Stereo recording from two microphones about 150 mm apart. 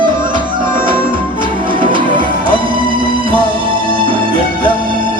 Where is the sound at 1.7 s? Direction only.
35° right (ahead or behind).